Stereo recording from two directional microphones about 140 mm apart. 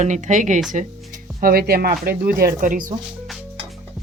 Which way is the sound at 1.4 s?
90° right.